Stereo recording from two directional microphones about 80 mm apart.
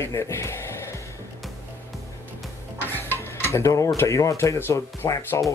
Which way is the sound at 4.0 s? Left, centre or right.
Left.